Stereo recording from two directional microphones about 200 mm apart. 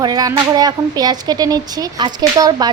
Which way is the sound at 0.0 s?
20° right (ahead or behind).